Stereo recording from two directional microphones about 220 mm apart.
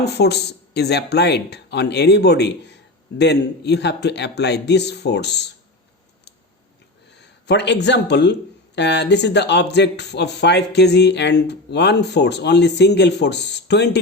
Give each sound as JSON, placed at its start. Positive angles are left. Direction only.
{"t": 0.0, "sound": "speech", "side_deg": 50}
{"t": 7.2, "sound": "speech", "side_deg": 50}